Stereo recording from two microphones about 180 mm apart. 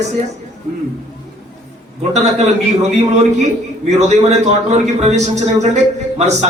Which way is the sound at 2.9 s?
40° right (ahead or behind).